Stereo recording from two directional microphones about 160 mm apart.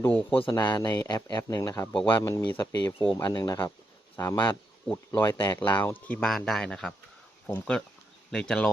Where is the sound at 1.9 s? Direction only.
10° left (ahead or behind).